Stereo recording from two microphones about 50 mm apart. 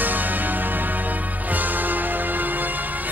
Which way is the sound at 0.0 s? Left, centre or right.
Right.